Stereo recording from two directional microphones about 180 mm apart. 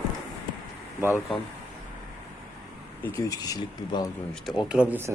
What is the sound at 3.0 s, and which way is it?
Speech, 15° left (ahead or behind).